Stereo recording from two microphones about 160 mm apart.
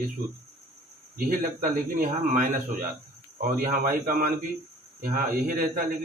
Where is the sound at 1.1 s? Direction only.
60° right (ahead or behind).